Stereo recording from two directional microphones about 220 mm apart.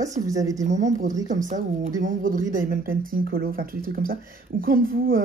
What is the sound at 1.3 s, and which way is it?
Speech, 35° right (ahead or behind).